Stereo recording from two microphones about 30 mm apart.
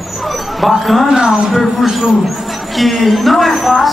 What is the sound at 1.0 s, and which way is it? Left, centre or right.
Speech, right.